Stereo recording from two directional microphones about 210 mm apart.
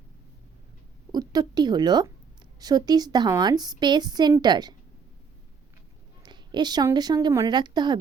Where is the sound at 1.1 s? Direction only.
20° right (ahead or behind).